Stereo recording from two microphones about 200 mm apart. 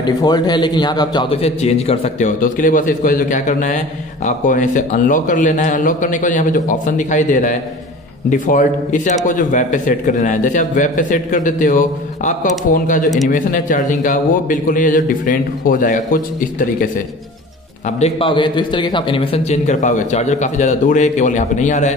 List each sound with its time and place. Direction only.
0.0 s a man's voice: 20° left (ahead or behind); by 16.9 s 40° left (ahead or behind)
18.0 s a man's voice: 25° left (ahead or behind)